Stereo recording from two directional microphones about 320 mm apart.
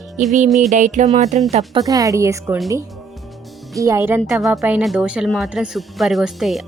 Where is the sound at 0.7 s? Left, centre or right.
Right.